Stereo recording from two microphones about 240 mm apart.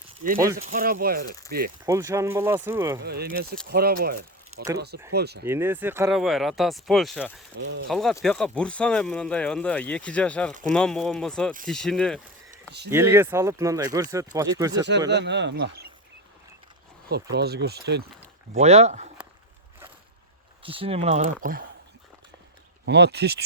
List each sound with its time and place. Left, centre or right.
0.2 s speech: right
1.8 s speech: centre
3.0 s speech: right
5.5 s speech: centre
7.6 s speech: right
7.9 s speech: centre
12.9 s speech: centre
14.8 s speech: right
17.3 s speech: right
18.5 s speech: right
20.6 s speech: right
22.9 s speech: right